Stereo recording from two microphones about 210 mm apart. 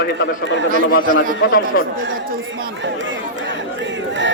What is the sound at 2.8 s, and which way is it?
Crowd, 60° right (ahead or behind).